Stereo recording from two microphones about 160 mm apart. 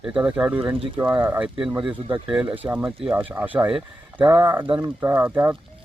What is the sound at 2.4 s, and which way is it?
Speech, 10° right (ahead or behind).